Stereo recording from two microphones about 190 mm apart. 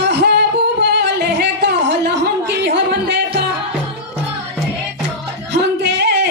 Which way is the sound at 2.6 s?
65° right (ahead or behind).